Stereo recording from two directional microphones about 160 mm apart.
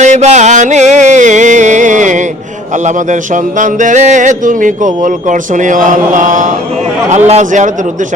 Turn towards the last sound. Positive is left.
turn(degrees=-50)  # may be behind; listen again after turning